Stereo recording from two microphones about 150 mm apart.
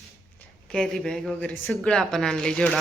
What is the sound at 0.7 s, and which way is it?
Speech, 5° left (ahead or behind).